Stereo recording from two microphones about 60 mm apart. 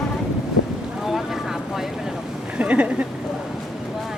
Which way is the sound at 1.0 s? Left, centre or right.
Centre.